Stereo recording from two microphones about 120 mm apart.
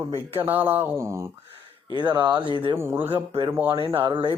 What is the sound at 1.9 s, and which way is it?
Speech, 40° right (ahead or behind).